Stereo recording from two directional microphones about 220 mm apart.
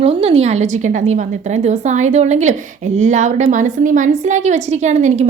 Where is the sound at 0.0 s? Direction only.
25° right (ahead or behind).